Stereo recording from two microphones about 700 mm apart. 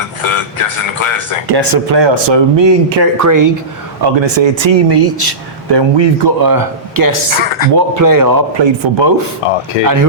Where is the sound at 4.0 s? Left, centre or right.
Right.